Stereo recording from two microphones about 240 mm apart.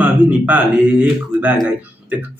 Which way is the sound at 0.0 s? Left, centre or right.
Centre.